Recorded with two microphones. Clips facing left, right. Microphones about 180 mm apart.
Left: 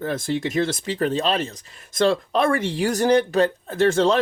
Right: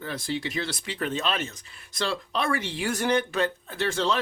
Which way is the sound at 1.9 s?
45° left (ahead or behind).